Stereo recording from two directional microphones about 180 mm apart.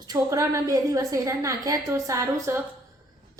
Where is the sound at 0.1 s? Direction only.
15° right (ahead or behind).